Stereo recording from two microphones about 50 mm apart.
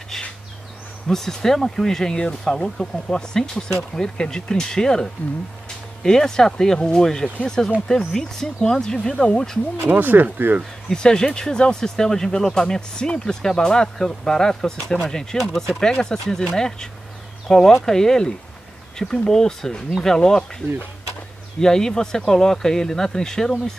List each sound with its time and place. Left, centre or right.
1.0 s speech: centre
9.8 s speech: right
10.9 s speech: centre